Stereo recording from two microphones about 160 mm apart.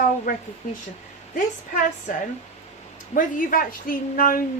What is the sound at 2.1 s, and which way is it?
Speech, 55° left (ahead or behind).